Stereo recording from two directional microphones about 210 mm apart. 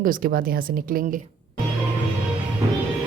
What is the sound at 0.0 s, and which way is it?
Speech, 45° right (ahead or behind).